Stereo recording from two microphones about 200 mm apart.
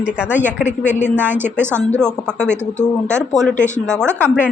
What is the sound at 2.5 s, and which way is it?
Speech, 35° left (ahead or behind).